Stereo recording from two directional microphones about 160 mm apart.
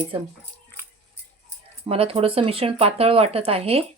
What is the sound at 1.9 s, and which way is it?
Speech, 35° right (ahead or behind).